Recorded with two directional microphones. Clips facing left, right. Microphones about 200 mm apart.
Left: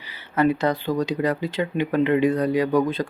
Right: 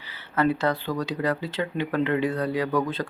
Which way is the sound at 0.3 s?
15° left (ahead or behind).